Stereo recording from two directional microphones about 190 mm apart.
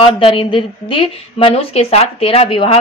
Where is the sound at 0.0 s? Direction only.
30° left (ahead or behind).